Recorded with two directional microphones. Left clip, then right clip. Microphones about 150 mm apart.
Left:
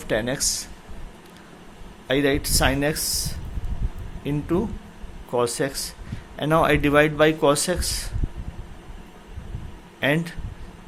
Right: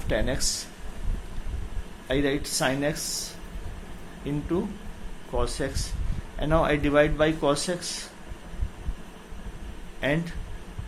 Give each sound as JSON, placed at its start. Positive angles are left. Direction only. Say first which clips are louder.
{"t": 0.1, "sound": "speech", "louder": "left 4 dB", "side_deg": 50}
{"t": 2.0, "sound": "speech", "louder": "left 5 dB", "side_deg": 55}
{"t": 10.0, "sound": "speech", "louder": "left 5 dB", "side_deg": 55}